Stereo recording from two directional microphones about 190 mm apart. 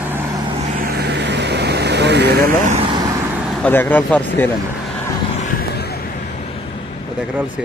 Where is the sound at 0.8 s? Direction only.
55° right (ahead or behind).